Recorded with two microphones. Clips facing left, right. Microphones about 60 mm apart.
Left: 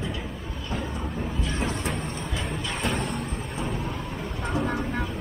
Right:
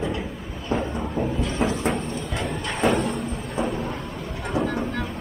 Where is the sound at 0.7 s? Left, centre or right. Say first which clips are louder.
Right 7 dB; right.